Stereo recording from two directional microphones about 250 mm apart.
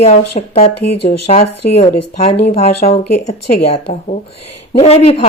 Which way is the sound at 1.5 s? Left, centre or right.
Left.